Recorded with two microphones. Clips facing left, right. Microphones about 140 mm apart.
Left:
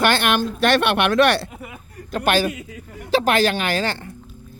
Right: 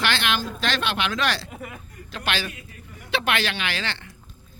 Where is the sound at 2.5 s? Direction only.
90° left.